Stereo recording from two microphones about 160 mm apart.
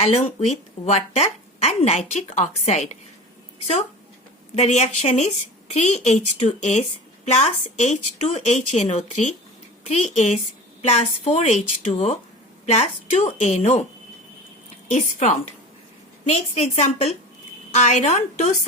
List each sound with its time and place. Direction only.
0.4 s a woman's voice: 45° left (ahead or behind)
4.5 s a woman's voice: 45° left (ahead or behind)
14.8 s a woman's voice: 45° left (ahead or behind)